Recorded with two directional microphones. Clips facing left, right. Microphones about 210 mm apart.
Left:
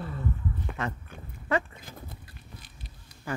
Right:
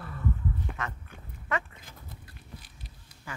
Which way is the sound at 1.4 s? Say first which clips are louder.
Left 5 dB; 35° left (ahead or behind).